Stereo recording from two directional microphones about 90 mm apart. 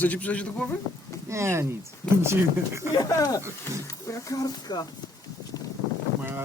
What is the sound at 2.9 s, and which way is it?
Speech, 45° left (ahead or behind).